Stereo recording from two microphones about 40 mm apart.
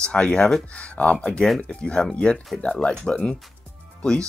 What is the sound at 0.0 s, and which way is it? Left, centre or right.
Speech, left.